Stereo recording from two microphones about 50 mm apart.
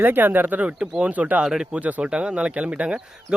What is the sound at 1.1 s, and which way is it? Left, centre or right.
Speech, right.